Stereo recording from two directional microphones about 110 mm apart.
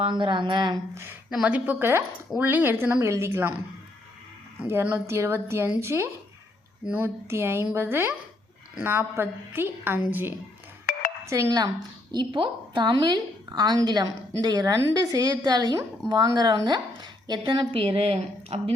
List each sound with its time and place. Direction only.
0.0 s speech: 45° right (ahead or behind)
1.3 s a woman's voice: 10° right (ahead or behind)
4.6 s a woman's voice: 20° right (ahead or behind)
11.3 s a woman's voice: 30° right (ahead or behind)
12.1 s a woman's voice: 45° right (ahead or behind); by 18.7 s 65° right (ahead or behind)